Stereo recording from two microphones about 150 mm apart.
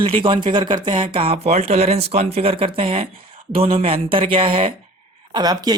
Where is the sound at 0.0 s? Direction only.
35° right (ahead or behind).